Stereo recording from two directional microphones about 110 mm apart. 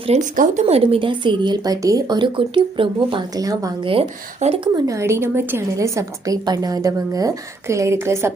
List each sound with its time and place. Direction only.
0.1 s speech: 75° right (ahead or behind); by 3.2 s 50° right (ahead or behind)
3.3 s a woman's voice: 30° right (ahead or behind)
3.8 s a woman's voice: 55° right (ahead or behind)
4.4 s speech: 90° right
4.9 s a woman's voice: 25° right (ahead or behind)